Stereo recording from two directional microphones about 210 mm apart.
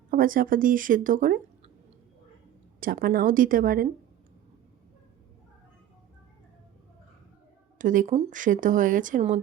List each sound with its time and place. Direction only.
0.1 s speech: 40° right (ahead or behind)
2.8 s speech: 40° right (ahead or behind)
7.8 s speech: 40° right (ahead or behind)